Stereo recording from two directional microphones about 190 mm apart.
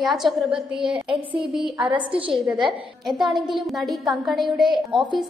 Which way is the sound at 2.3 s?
Centre (ahead or behind).